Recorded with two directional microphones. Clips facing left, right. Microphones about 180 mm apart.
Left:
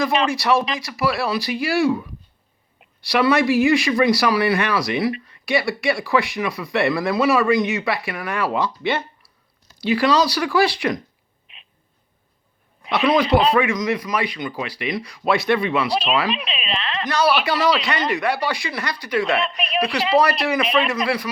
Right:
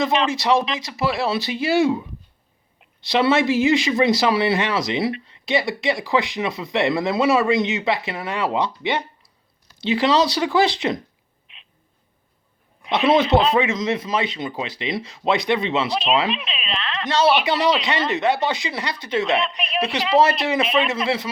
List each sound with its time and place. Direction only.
0.3 s speech: 20° right (ahead or behind)
12.9 s speech: 20° right (ahead or behind)
16.3 s speech: centre (ahead or behind)
17.1 s speech: 25° right (ahead or behind)
19.4 s a woman's voice: centre (ahead or behind)
20.4 s speech: 25° right (ahead or behind)